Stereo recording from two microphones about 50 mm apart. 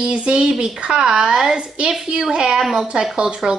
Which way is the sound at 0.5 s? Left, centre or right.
Centre.